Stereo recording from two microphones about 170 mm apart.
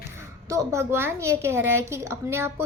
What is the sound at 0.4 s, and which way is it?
A woman's voice, 20° right (ahead or behind).